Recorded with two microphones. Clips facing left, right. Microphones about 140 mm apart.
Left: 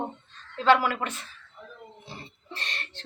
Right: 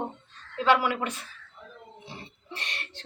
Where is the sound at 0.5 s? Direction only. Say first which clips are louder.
Left 2 dB; 10° right (ahead or behind).